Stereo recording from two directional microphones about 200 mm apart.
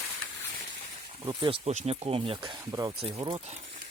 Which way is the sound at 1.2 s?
20° right (ahead or behind).